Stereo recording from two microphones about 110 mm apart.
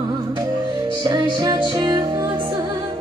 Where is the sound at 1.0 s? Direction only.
40° right (ahead or behind).